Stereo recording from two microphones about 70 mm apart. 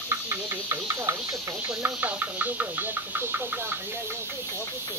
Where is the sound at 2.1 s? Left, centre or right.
Right.